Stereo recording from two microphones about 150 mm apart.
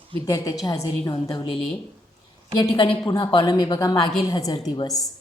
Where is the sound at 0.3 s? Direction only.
25° left (ahead or behind).